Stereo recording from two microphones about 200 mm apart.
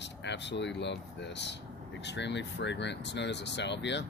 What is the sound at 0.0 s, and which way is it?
Speech, 60° left (ahead or behind).